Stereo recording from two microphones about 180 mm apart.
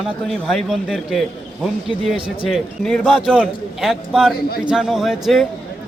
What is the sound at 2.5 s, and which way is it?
A man's voice, 5° left (ahead or behind).